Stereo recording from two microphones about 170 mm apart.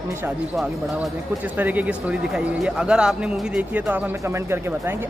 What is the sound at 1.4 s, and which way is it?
A man's voice, 10° right (ahead or behind).